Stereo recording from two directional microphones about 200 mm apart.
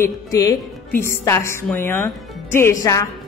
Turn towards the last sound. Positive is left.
turn(degrees=15)  # may be behind; listen again after turning